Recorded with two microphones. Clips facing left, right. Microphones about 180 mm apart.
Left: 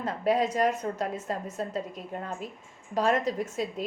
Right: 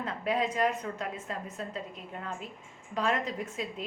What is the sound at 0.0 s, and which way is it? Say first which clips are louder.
A woman's voice: left 5 dB; 40° left (ahead or behind).